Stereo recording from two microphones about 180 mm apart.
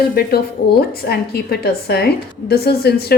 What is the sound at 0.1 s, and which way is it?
A woman's voice, 60° left (ahead or behind).